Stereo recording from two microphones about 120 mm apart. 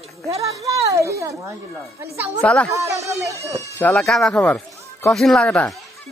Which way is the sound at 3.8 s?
15° left (ahead or behind).